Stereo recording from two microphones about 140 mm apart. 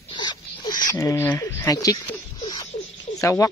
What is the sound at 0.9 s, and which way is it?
Speech, 20° left (ahead or behind).